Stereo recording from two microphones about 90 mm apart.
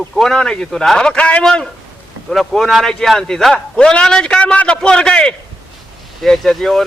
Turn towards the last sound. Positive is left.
turn(degrees=0)  # may be behind; listen again after turning